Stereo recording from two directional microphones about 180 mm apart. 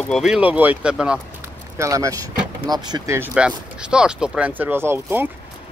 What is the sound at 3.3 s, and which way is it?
Speech, 5° right (ahead or behind).